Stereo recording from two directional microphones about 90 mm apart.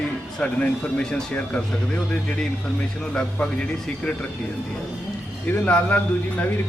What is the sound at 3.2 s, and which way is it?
Speech, 10° left (ahead or behind).